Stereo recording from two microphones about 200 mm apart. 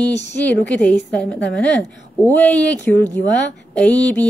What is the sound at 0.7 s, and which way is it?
A woman's voice, 5° left (ahead or behind).